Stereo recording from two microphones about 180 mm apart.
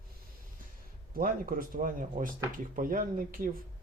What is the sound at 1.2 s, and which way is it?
Speech, 50° right (ahead or behind).